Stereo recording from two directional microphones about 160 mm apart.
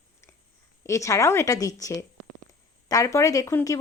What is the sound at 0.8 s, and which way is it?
A woman's voice, 20° left (ahead or behind).